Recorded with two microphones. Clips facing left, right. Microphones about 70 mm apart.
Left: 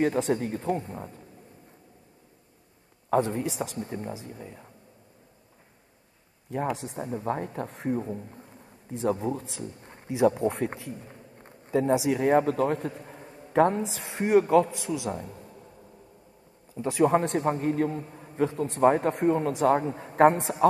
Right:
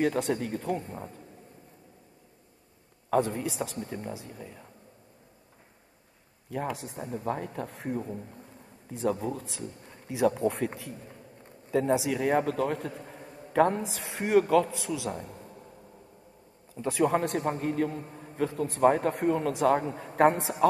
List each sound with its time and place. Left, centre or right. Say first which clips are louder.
0.0 s a man's voice: left 2 dB; left
3.1 s a man's voice: left 2 dB; left
6.5 s a man's voice: left 3 dB; left
8.9 s speech: left 2 dB; left
12.9 s a sound: even; centre
13.5 s a man's voice: left 2 dB; left
15.1 s a man's voice: left 2 dB; centre
17.0 s a man's voice: left 3 dB; left
20.2 s a man's voice: left 3 dB; left